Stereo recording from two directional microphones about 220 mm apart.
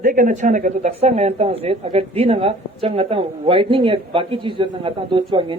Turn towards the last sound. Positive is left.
turn(degrees=-20)  # may be behind; listen again after turning